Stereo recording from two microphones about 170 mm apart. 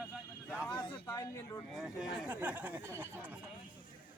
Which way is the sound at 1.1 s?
20° left (ahead or behind).